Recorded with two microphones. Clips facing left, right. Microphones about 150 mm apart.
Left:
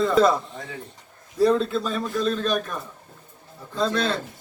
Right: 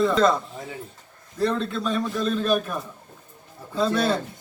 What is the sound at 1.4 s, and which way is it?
A man's voice, 5° left (ahead or behind).